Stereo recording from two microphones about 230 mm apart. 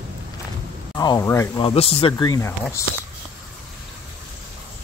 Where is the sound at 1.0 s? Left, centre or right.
Centre.